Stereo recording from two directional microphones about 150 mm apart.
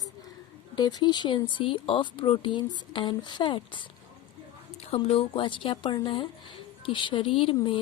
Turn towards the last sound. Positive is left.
turn(degrees=35)  # may be behind; listen again after turning